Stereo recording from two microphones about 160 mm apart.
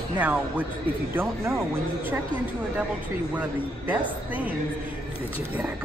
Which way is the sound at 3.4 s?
10° right (ahead or behind).